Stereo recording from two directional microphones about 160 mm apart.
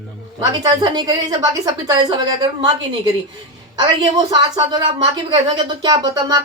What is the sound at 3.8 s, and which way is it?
A woman's voice, 25° right (ahead or behind).